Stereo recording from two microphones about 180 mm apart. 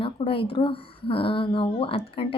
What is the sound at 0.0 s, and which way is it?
A woman's voice, 30° left (ahead or behind).